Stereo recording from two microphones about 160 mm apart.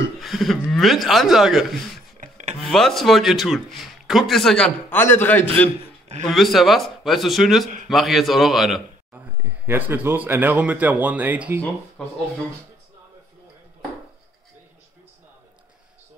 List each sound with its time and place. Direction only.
0.2 s a man's voice: centre (ahead or behind)
2.1 s chopping: 50° right (ahead or behind)
2.6 s a man's voice: centre (ahead or behind)
6.2 s a man's voice: centre (ahead or behind)
9.4 s speech: 10° right (ahead or behind)
12.0 s a man's voice: 5° left (ahead or behind)